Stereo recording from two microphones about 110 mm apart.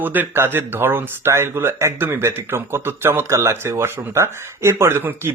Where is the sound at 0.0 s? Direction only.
15° right (ahead or behind).